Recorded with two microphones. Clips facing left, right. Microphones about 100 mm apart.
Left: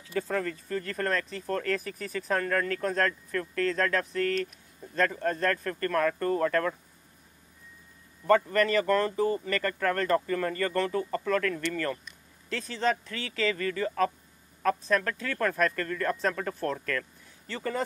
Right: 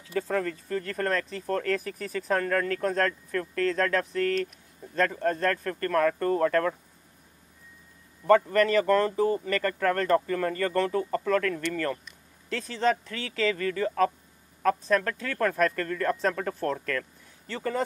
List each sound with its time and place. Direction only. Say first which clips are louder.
0.1 s speech: right 2 dB; 50° right (ahead or behind)
5.2 s speech: right 2 dB; 50° right (ahead or behind)
6.1 s speech: right 2 dB; 40° right (ahead or behind)
8.5 s speech: right 2 dB; 60° right (ahead or behind)
9.1 s speech: right 2 dB; 25° right (ahead or behind)
9.5 s speech: right 2 dB; 55° right (ahead or behind)